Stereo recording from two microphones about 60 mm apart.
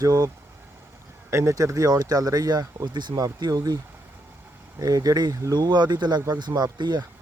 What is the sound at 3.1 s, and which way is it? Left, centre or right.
Speech, right.